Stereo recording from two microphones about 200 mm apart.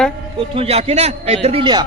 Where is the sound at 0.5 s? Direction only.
30° right (ahead or behind).